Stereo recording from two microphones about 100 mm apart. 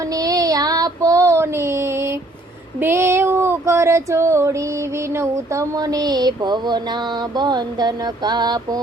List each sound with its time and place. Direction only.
0.1 s child singing: 35° right (ahead or behind)
2.8 s female singing: 25° right (ahead or behind)
5.1 s a sound: 30° right (ahead or behind)